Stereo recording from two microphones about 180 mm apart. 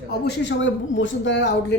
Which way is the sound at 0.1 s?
75° left (ahead or behind).